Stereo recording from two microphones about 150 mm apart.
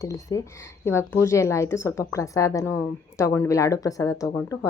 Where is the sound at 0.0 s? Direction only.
20° left (ahead or behind).